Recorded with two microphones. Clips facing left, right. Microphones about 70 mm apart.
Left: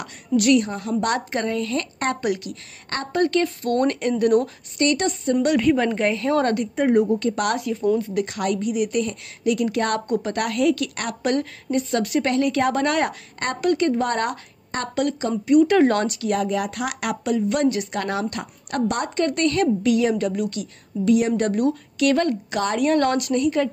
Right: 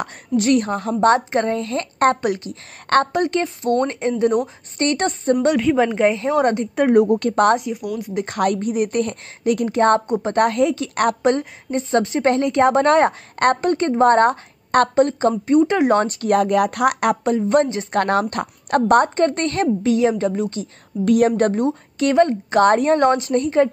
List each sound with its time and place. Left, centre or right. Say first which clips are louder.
0.6 s a woman's voice: right 4 dB; right
4.7 s a woman's voice: right 1 dB; right
5.6 s a woman's voice: right 2 dB; centre
5.9 s a woman's voice: right 3 dB; centre
6.7 s a woman's voice: right 4 dB; right
7.3 s a woman's voice: right 7 dB; right
8.3 s a woman's voice: right 4 dB; right
9.7 s a woman's voice: right 6 dB; right
16.1 s a woman's voice: right 6 dB; right
17.9 s a woman's voice: right 7 dB; right
21.0 s a woman's voice: right 3 dB; right
22.6 s a woman's voice: right 8 dB; right
22.9 s a woman's voice: right 3 dB; right